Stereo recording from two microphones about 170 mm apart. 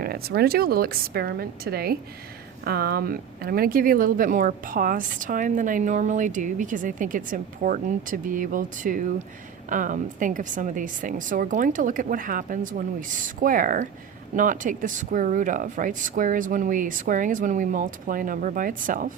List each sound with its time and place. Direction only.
0.0 s speech: 65° right (ahead or behind)